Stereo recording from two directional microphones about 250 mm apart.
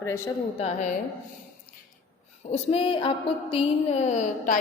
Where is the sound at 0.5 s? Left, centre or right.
Left.